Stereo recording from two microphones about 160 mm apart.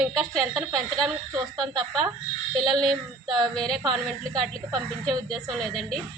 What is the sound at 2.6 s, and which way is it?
A woman's voice, centre (ahead or behind).